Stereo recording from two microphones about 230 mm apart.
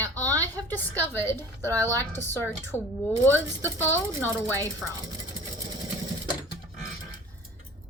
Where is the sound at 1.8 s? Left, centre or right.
Centre.